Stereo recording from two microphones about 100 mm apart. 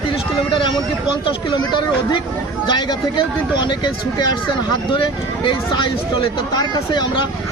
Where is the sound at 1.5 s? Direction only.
50° left (ahead or behind).